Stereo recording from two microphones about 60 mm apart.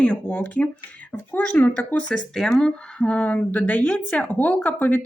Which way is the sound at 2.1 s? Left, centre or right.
Centre.